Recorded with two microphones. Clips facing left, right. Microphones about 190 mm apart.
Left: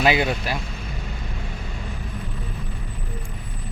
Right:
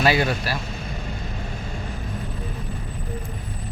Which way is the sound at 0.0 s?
15° left (ahead or behind).